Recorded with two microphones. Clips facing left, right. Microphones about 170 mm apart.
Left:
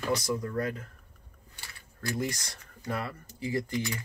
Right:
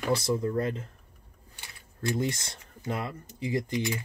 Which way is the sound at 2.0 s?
25° right (ahead or behind).